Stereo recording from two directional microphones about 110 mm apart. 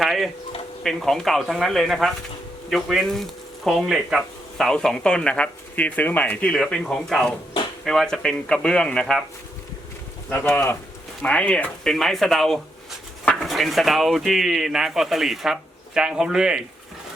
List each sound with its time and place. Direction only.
0.0 s a sound: centre (ahead or behind)
0.8 s speech: centre (ahead or behind)
10.2 s speech: 15° left (ahead or behind)
11.2 s speech: 10° left (ahead or behind); by 16.6 s 5° right (ahead or behind)